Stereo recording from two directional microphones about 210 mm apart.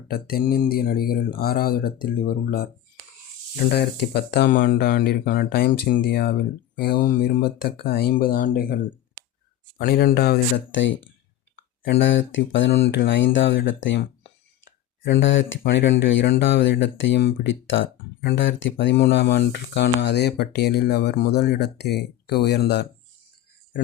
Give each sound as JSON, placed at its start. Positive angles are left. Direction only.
{"t": 0.1, "sound": "speech", "side_deg": 45}
{"t": 3.7, "sound": "speech", "side_deg": 50}
{"t": 11.9, "sound": "speech", "side_deg": 65}